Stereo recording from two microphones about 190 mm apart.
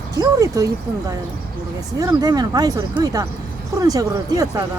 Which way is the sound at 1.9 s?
20° right (ahead or behind).